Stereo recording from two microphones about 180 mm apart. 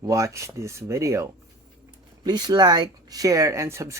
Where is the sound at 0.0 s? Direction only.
15° right (ahead or behind).